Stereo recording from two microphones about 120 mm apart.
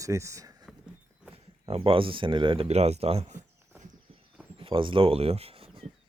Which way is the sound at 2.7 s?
60° right (ahead or behind).